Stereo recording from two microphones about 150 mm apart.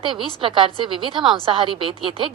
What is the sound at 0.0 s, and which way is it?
A woman's voice, 35° right (ahead or behind).